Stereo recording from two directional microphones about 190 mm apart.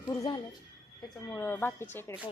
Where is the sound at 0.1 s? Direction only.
20° left (ahead or behind).